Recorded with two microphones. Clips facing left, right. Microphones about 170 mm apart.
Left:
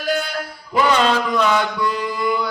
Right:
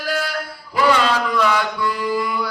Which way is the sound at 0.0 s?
20° left (ahead or behind).